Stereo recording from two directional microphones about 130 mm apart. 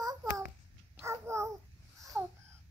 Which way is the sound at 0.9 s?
20° right (ahead or behind).